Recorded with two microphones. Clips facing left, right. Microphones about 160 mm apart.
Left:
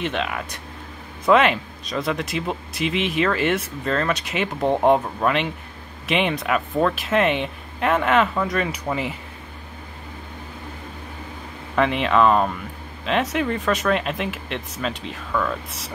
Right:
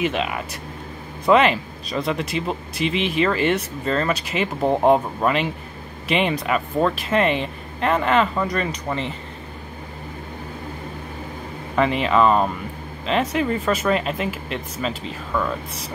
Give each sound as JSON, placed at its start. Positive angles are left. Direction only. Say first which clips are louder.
{"t": 0.0, "sound": "speech", "louder": "right 2 dB", "side_deg": -5}
{"t": 11.7, "sound": "speech", "louder": "right 1 dB", "side_deg": 0}